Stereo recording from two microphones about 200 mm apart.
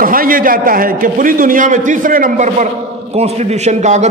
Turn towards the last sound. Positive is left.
turn(degrees=-35)  # may be behind; listen again after turning